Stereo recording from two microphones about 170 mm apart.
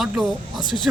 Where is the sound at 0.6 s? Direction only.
25° left (ahead or behind).